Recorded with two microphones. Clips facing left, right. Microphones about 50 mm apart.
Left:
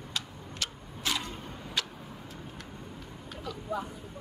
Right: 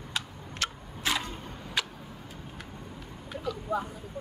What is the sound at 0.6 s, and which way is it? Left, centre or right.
Tick-tock, right.